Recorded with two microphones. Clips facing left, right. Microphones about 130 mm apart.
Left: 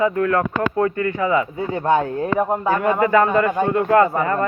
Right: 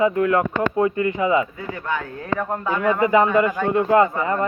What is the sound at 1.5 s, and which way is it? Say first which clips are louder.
A man's voice: left 8 dB; 30° left (ahead or behind).